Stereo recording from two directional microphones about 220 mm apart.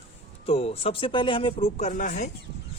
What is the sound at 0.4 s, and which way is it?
Speech, 25° left (ahead or behind).